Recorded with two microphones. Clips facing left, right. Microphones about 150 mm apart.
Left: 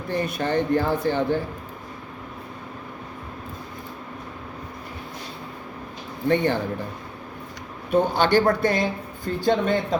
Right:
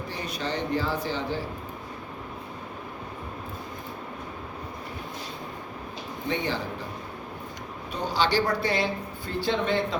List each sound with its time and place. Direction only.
0.1 s speech: 55° left (ahead or behind)
6.2 s speech: 55° left (ahead or behind)
7.9 s speech: 55° left (ahead or behind)